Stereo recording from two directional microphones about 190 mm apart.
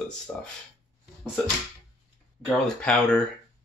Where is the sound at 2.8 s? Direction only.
5° left (ahead or behind).